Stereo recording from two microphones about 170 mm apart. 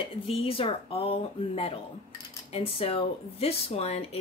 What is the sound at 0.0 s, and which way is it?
Speech, 35° left (ahead or behind).